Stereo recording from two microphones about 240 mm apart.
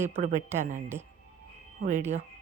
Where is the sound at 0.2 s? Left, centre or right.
Right.